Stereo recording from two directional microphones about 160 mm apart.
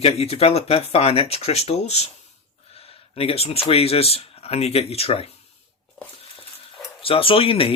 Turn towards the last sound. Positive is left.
turn(degrees=35)  # may be behind; listen again after turning